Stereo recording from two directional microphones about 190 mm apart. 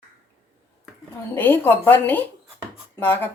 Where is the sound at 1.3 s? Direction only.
10° left (ahead or behind).